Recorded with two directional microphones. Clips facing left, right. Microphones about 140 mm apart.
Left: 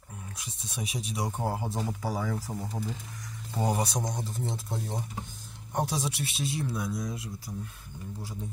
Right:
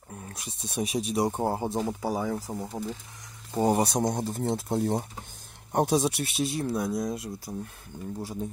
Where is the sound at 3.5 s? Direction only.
35° right (ahead or behind).